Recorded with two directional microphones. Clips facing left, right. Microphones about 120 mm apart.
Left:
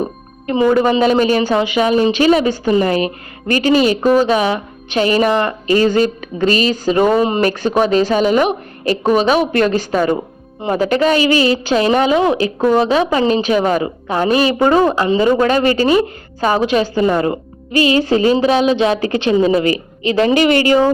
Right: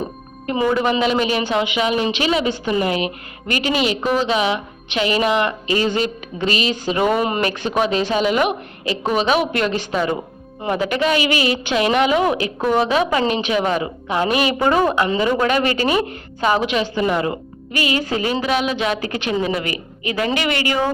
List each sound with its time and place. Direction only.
0.7 s a woman's voice: 40° left (ahead or behind)
7.4 s a woman's voice: 40° left (ahead or behind)